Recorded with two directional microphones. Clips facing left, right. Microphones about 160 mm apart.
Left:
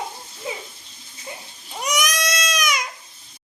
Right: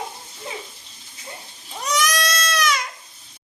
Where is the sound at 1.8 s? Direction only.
15° left (ahead or behind).